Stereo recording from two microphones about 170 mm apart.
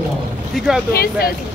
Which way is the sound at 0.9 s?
65° left (ahead or behind).